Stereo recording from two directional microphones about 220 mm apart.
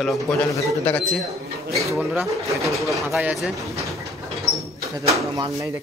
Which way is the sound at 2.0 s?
10° right (ahead or behind).